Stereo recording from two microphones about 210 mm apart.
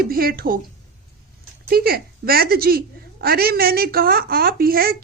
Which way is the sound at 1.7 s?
45° right (ahead or behind).